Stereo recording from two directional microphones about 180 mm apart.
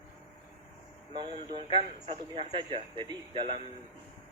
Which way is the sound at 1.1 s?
25° right (ahead or behind).